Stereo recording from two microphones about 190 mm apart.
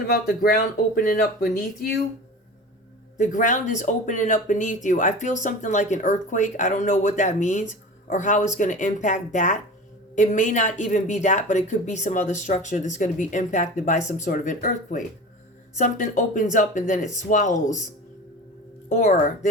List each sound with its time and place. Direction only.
0.1 s speech: 50° left (ahead or behind)
3.2 s speech: 40° left (ahead or behind)
19.1 s speech: 45° left (ahead or behind)